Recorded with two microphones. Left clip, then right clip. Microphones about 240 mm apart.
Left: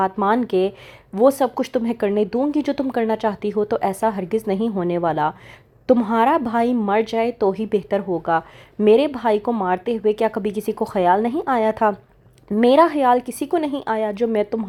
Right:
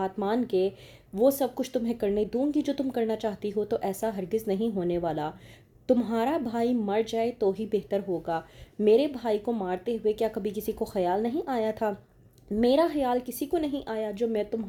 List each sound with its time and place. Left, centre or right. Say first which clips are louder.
0.0 s speech: left 10 dB; left